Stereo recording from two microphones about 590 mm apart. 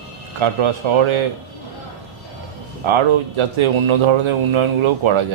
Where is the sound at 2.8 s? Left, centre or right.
Right.